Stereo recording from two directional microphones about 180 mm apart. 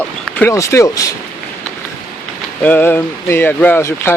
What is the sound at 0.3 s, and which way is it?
Speech, 15° left (ahead or behind).